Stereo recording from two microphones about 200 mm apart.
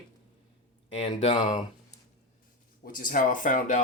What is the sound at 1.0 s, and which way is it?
Speech, 25° left (ahead or behind).